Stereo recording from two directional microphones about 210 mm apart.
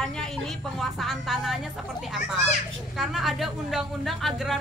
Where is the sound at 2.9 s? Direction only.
Centre (ahead or behind).